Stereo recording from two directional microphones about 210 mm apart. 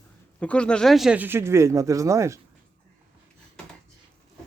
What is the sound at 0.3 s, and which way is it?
Speech, 5° left (ahead or behind).